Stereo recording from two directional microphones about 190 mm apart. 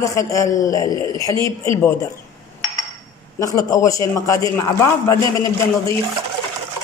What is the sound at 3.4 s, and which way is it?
A man's voice, 15° left (ahead or behind).